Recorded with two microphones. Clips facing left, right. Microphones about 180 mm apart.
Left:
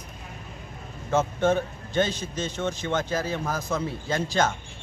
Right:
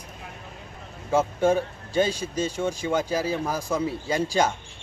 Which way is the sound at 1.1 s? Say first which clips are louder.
Right 1 dB; 10° right (ahead or behind).